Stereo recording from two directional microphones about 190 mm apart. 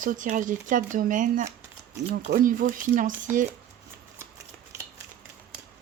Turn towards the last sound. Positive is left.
turn(degrees=-15)  # may be behind; listen again after turning